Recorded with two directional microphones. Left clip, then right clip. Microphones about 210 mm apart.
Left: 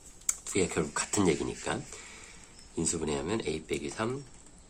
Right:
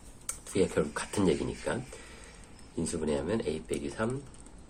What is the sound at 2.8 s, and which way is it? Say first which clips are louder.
Speech: right 1 dB; 45° left (ahead or behind).